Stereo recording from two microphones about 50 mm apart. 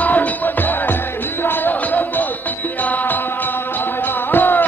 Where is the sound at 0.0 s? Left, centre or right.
Left.